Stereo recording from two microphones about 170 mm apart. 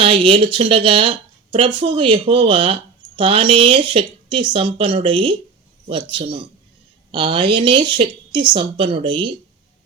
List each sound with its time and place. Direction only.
0.0 s speech: 30° right (ahead or behind)